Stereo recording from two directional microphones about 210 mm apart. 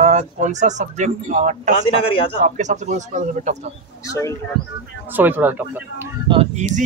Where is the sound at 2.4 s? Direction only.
35° right (ahead or behind).